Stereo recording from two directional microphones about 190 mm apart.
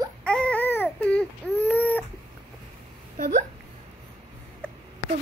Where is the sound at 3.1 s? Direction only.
45° right (ahead or behind).